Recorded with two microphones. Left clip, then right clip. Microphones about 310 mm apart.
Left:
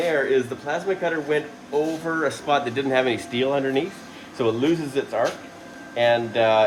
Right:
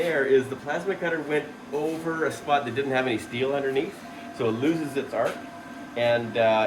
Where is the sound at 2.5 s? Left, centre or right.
Left.